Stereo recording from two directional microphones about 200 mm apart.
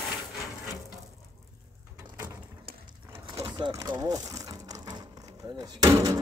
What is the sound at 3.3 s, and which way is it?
Sewing machine, 25° right (ahead or behind).